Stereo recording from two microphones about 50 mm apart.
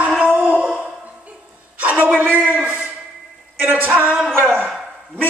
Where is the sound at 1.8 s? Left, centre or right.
Right.